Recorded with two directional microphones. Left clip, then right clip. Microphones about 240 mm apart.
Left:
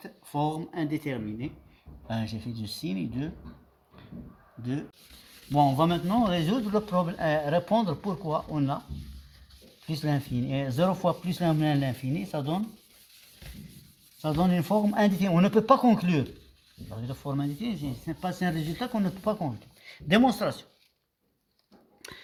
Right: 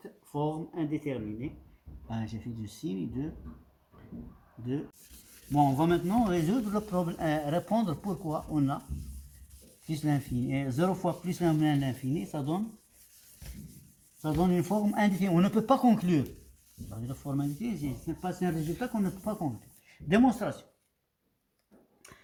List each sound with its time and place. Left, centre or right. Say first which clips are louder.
0.3 s speech: left 3 dB; left
5.5 s speech: left 2 dB; left
9.8 s speech: left 1 dB; left
14.2 s speech: left 2 dB; left
22.0 s a sound: left 10 dB; left